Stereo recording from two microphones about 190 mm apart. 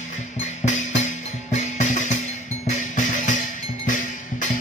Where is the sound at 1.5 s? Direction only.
40° left (ahead or behind).